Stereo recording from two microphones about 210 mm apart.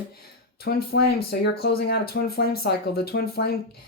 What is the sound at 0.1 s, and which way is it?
Speech, 50° left (ahead or behind).